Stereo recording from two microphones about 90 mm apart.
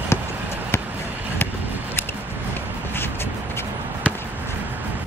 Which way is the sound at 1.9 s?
25° left (ahead or behind).